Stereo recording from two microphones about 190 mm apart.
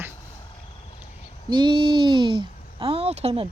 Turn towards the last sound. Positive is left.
turn(degrees=-35)  # may be behind; listen again after turning